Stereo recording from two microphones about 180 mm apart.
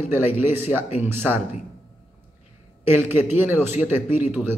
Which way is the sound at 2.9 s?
10° right (ahead or behind).